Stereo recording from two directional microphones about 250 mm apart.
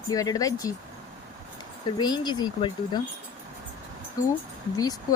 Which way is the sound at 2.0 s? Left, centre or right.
Centre.